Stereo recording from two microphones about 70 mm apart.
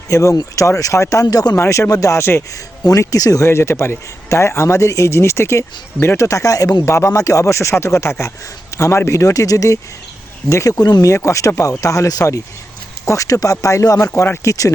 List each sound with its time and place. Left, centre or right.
0.1 s speech: left
1.5 s speech: left
1.9 s speech: left
3.0 s speech: left
3.4 s speech: left
6.1 s speech: left
11.0 s speech: left